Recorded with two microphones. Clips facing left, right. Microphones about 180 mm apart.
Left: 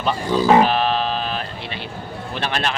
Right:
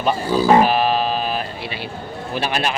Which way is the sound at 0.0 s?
10° right (ahead or behind).